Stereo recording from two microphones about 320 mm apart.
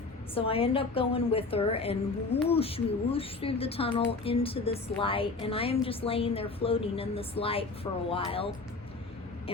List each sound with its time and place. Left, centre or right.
0.3 s a woman's voice: centre